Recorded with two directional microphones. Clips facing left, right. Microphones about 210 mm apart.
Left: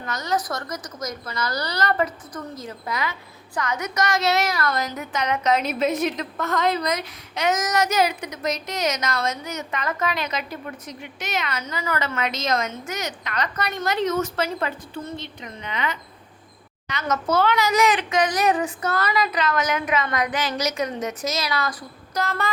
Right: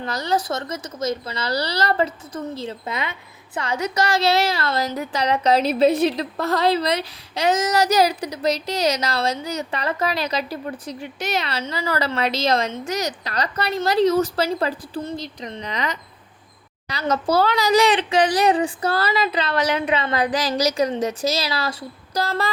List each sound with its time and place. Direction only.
0.0 s speech: 30° right (ahead or behind)